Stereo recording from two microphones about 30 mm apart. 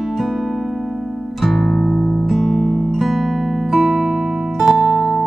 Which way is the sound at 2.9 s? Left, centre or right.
Centre.